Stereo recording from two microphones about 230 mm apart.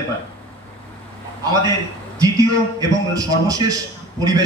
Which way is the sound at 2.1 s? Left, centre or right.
Centre.